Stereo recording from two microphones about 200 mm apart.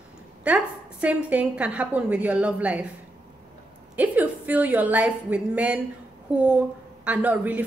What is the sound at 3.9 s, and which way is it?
A man's voice, 10° right (ahead or behind).